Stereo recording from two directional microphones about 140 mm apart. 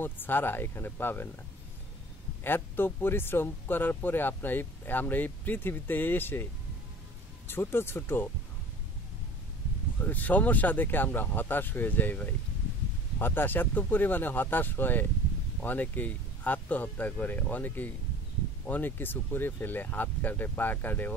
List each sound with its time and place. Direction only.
0.0 s speech: 15° left (ahead or behind)
2.4 s speech: 15° left (ahead or behind)
7.4 s speech: 15° left (ahead or behind)
10.0 s speech: 10° left (ahead or behind)